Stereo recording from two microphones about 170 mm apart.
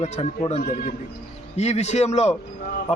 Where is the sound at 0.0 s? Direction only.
40° left (ahead or behind).